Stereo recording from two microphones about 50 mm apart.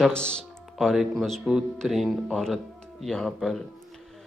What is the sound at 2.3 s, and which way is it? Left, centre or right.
A man's voice, centre.